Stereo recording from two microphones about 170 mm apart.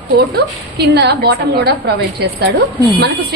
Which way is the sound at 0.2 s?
75° right (ahead or behind).